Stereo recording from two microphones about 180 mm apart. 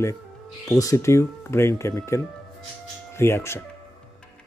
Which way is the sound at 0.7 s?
20° left (ahead or behind).